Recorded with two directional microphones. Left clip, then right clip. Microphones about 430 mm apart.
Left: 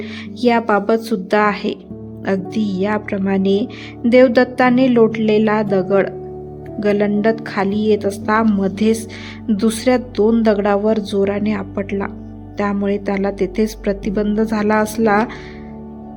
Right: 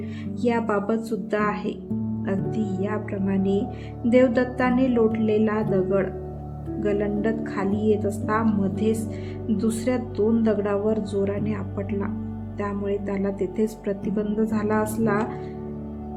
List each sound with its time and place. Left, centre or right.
0.4 s a woman's voice: centre